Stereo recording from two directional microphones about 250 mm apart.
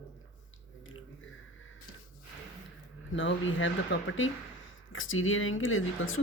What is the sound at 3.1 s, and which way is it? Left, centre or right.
Speech, left.